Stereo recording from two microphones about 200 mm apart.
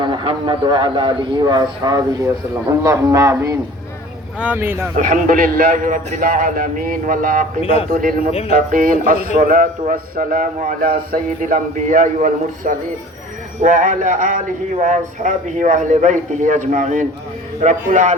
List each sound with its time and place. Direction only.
0.0 s a man's voice: 25° right (ahead or behind)
4.9 s a man's voice: 40° right (ahead or behind)
7.6 s speech: 30° left (ahead or behind)
7.9 s a man's voice: 40° right (ahead or behind)
8.3 s music: 30° left (ahead or behind)
8.5 s a man's voice: 45° right (ahead or behind)